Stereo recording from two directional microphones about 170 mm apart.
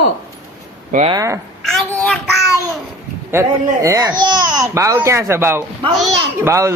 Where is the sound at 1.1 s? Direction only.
20° right (ahead or behind).